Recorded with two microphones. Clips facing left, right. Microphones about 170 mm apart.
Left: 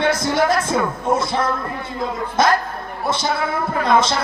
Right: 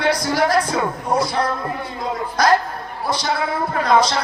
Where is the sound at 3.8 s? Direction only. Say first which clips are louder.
Right 1 dB; 25° left (ahead or behind).